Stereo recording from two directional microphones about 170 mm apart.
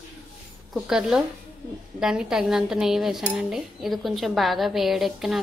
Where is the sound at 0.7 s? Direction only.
5° right (ahead or behind).